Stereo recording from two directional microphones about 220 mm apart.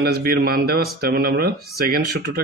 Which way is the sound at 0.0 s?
45° right (ahead or behind).